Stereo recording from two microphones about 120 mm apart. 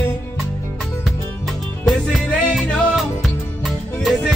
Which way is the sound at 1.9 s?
Centre (ahead or behind).